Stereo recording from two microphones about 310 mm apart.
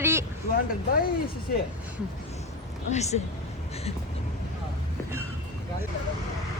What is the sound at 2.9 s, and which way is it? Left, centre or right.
Speech, left.